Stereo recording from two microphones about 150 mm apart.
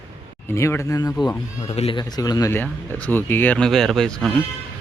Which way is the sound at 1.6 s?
45° left (ahead or behind).